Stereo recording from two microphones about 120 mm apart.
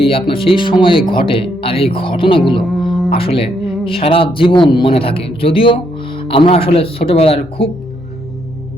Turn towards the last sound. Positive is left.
turn(degrees=55)  # may be behind; listen again after turning